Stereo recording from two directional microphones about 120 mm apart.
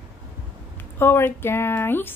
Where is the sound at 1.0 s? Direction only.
20° left (ahead or behind).